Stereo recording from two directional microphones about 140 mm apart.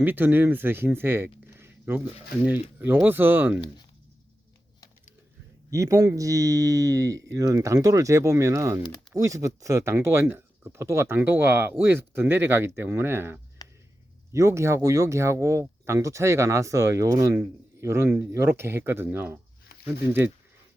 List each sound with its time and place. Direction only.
0.0 s speech: 15° right (ahead or behind)
0.9 s a sound: 15° right (ahead or behind)
2.4 s speech: 15° right (ahead or behind)
5.7 s speech: 25° right (ahead or behind)
13.6 s a sound: 25° left (ahead or behind)
14.3 s speech: 20° right (ahead or behind)